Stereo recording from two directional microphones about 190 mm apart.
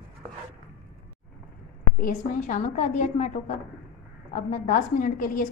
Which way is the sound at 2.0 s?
45° left (ahead or behind).